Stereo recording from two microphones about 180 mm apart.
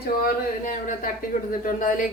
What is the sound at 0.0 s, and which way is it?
Speech, 55° left (ahead or behind).